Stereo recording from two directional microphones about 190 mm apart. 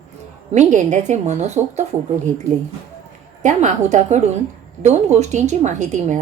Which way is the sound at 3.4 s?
40° right (ahead or behind).